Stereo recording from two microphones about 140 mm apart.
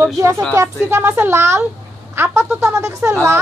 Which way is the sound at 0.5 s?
20° right (ahead or behind).